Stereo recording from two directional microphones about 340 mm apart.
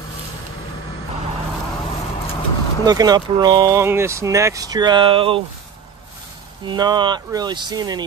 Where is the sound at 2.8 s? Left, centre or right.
Centre.